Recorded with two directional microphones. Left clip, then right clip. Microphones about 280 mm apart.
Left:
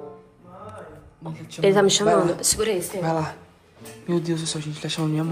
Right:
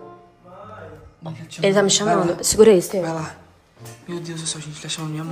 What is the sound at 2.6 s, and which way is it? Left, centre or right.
Speech, right.